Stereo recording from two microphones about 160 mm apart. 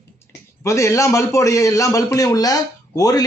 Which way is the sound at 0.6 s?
20° left (ahead or behind).